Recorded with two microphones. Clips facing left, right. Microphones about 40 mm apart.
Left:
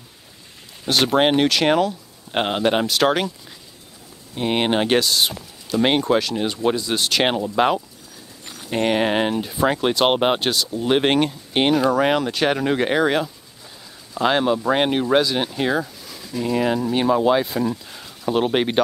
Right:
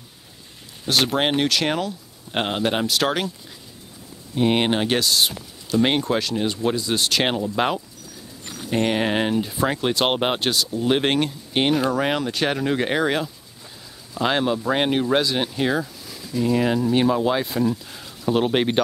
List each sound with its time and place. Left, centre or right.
0.8 s speech: centre
2.3 s speech: centre
4.4 s speech: centre
4.7 s speech: centre
11.7 s speech: centre